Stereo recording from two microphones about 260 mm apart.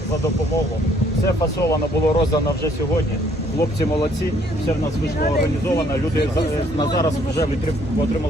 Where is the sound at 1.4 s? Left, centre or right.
Centre.